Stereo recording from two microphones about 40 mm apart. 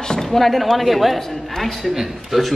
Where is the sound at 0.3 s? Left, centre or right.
Centre.